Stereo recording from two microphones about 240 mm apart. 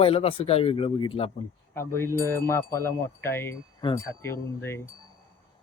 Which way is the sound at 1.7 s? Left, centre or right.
Centre.